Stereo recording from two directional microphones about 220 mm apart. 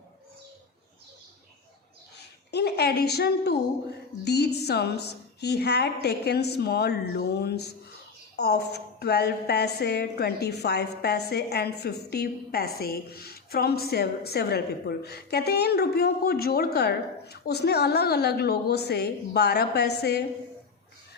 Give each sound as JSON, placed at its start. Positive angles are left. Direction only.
{"t": 2.5, "sound": "a woman's voice", "side_deg": 50}